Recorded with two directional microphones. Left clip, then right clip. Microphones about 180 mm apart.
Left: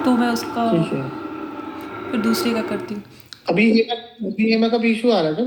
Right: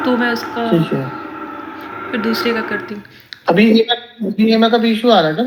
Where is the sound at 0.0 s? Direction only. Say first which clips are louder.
Right 3 dB; 45° left (ahead or behind).